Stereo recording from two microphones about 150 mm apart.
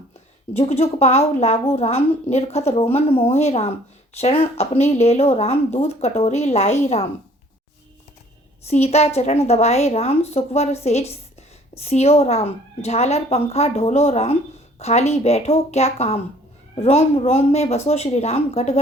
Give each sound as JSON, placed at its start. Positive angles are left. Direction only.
{"t": 0.5, "sound": "speech", "side_deg": 45}
{"t": 8.6, "sound": "speech", "side_deg": 45}